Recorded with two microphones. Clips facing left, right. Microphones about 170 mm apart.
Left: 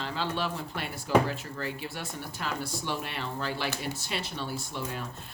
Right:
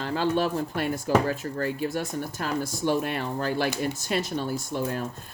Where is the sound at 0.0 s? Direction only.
50° right (ahead or behind).